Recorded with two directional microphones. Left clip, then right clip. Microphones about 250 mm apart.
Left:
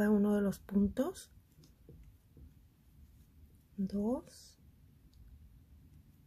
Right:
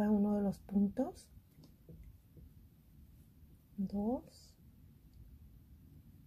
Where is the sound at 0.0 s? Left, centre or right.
Centre.